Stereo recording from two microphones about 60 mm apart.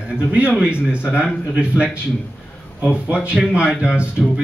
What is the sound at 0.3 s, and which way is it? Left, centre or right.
A man's voice, centre.